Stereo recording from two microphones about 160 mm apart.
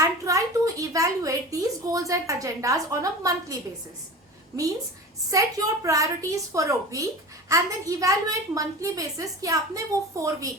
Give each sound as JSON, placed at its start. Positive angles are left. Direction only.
{"t": 0.0, "sound": "a woman's voice", "side_deg": -20}
{"t": 5.3, "sound": "a woman's voice", "side_deg": -20}